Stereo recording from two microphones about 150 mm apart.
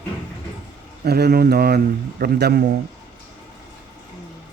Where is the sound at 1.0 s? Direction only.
90° right.